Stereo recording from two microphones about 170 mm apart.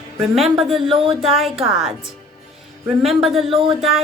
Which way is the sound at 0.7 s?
30° right (ahead or behind).